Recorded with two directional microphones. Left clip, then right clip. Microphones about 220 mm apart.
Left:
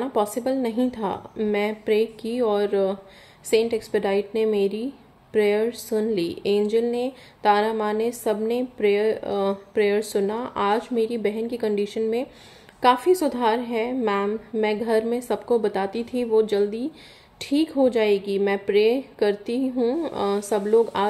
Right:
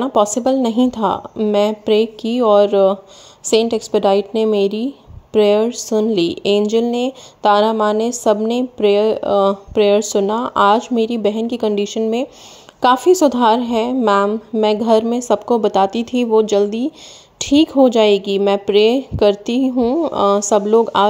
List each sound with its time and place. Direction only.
0.0 s a woman's voice: 30° right (ahead or behind)